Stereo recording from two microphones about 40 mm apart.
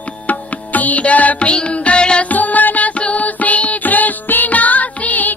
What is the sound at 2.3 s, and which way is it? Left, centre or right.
Music, left.